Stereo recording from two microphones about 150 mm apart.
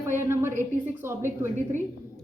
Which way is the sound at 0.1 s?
15° right (ahead or behind).